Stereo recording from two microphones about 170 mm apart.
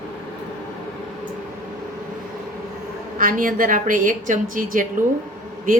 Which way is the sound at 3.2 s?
55° right (ahead or behind).